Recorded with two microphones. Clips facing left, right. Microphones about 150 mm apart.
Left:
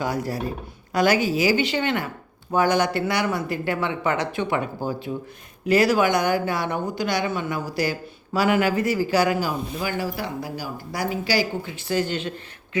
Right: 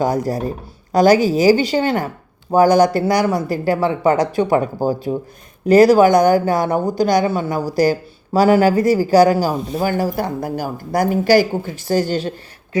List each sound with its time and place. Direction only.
0.0 s a woman's voice: 40° right (ahead or behind)